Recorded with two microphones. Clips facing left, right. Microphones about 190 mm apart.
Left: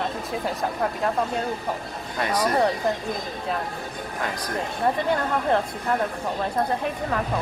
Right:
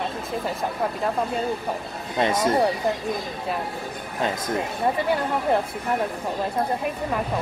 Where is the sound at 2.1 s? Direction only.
25° right (ahead or behind).